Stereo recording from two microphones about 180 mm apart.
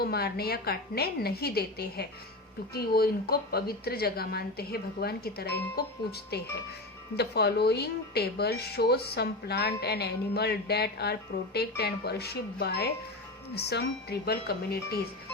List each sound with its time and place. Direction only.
0.0 s speech: 60° left (ahead or behind)